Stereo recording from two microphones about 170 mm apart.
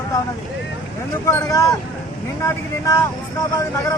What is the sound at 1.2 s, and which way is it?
Speech, 20° left (ahead or behind).